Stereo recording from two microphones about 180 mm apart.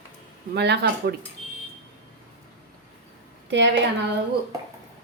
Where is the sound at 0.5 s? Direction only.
70° right (ahead or behind).